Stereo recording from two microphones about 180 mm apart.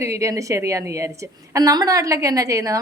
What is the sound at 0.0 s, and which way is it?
A woman's voice, 15° right (ahead or behind).